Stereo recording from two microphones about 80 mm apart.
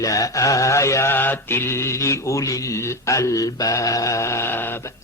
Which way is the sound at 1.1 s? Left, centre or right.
Left.